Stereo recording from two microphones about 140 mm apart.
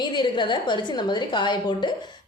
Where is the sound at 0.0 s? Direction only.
30° left (ahead or behind).